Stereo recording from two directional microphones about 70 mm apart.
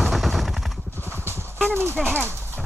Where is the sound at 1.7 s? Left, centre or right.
Right.